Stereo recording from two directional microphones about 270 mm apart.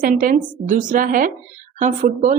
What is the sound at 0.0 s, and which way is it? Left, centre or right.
A woman's voice, right.